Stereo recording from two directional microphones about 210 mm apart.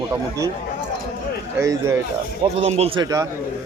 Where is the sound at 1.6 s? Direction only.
15° right (ahead or behind).